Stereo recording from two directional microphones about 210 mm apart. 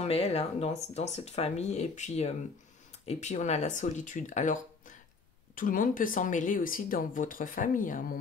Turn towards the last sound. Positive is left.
turn(degrees=40)  # may be behind; listen again after turning